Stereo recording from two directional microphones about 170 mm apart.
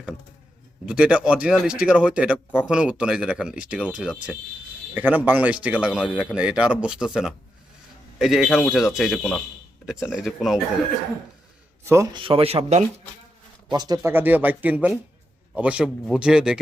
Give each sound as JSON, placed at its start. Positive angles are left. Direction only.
{"t": 0.9, "sound": "speech", "side_deg": -5}
{"t": 11.8, "sound": "a man's voice", "side_deg": -15}
{"t": 12.1, "sound": "speech", "side_deg": -30}
{"t": 13.7, "sound": "speech", "side_deg": -25}